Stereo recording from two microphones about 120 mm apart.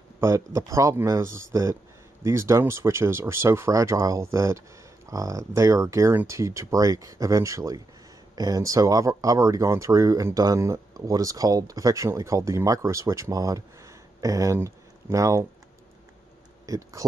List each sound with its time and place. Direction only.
0.2 s speech: 25° right (ahead or behind)
16.6 s speech: 30° right (ahead or behind)